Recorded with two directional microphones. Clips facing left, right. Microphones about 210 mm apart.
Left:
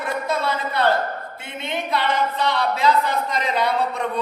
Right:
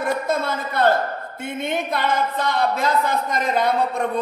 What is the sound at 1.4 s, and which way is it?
Speech, 50° right (ahead or behind).